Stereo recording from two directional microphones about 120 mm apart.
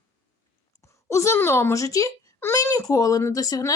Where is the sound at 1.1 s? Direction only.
25° left (ahead or behind).